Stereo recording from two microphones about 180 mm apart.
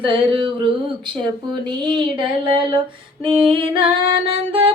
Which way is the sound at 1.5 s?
25° right (ahead or behind).